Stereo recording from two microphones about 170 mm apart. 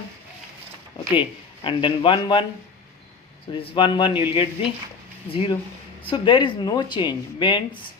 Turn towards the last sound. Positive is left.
turn(degrees=30)  # may be behind; listen again after turning